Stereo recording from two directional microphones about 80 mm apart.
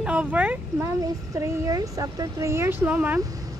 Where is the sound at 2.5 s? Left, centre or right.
Right.